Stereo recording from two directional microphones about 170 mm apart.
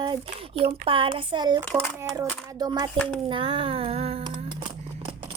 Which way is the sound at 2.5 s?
25° right (ahead or behind).